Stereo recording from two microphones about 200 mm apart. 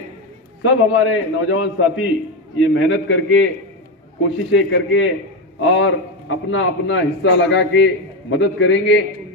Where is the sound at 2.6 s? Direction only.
70° left (ahead or behind).